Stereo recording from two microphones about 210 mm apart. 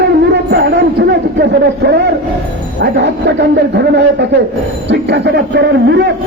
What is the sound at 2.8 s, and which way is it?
A man's voice, 55° right (ahead or behind).